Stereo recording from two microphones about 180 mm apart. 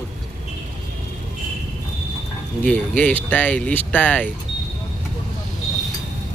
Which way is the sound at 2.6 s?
10° left (ahead or behind).